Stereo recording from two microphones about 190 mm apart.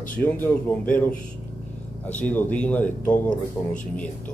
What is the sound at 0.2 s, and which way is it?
A man's voice, 10° left (ahead or behind).